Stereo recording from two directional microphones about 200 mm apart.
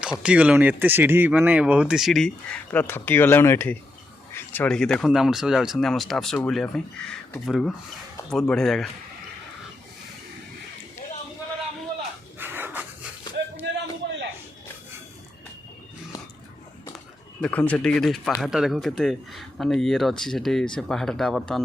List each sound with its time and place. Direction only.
0.0 s speech: 5° right (ahead or behind)
12.4 s dog: 10° right (ahead or behind)
14.0 s a sound: 60° right (ahead or behind)
17.4 s speech: 5° left (ahead or behind)